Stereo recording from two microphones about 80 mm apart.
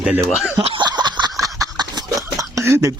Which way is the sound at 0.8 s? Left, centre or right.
Right.